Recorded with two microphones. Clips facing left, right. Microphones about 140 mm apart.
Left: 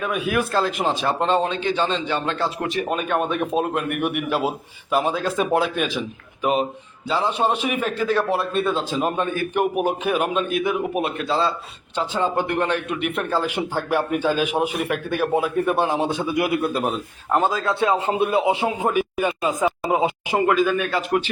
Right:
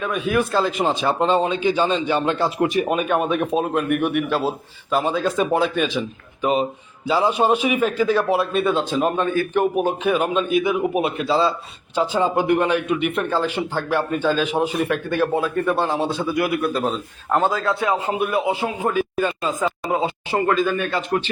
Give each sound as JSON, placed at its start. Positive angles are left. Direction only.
{"t": 0.0, "sound": "a man's voice", "side_deg": 5}
{"t": 7.1, "sound": "a man's voice", "side_deg": -5}